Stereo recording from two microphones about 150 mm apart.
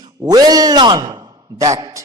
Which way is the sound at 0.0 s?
25° right (ahead or behind).